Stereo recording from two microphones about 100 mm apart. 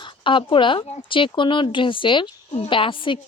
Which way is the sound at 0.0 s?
55° left (ahead or behind).